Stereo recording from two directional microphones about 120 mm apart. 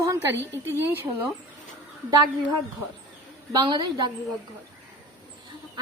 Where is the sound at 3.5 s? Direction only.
35° right (ahead or behind).